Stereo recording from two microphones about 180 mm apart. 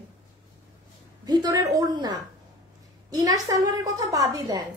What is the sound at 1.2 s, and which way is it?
A woman's voice, 25° right (ahead or behind).